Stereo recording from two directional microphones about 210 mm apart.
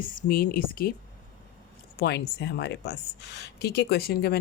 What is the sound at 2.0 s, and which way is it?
A woman's voice, 50° left (ahead or behind).